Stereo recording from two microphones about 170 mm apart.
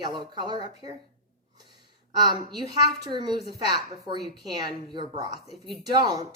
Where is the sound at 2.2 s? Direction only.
25° right (ahead or behind).